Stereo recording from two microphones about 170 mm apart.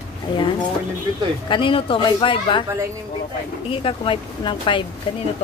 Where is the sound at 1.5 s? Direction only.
30° left (ahead or behind).